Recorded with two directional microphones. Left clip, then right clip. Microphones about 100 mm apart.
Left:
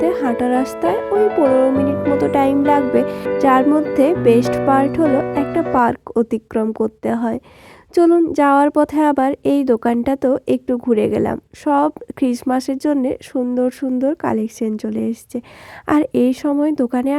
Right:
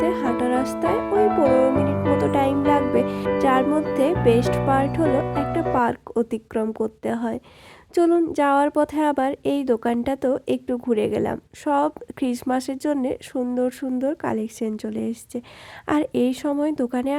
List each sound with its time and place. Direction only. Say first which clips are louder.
0.0 s a woman's voice: left 4 dB; 35° left (ahead or behind)